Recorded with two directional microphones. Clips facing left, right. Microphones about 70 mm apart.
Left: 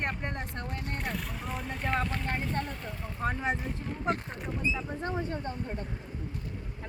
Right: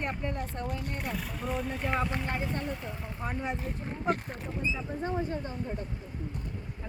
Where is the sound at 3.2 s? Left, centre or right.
Left.